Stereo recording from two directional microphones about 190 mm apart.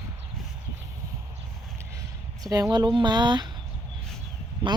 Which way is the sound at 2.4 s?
20° right (ahead or behind).